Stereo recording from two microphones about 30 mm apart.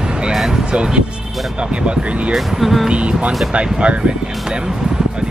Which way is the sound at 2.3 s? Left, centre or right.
Centre.